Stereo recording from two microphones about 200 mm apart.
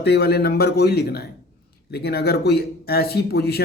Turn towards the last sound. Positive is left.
turn(degrees=50)  # may be behind; listen again after turning